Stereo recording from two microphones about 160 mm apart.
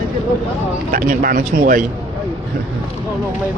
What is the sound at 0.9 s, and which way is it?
Speech, 55° right (ahead or behind).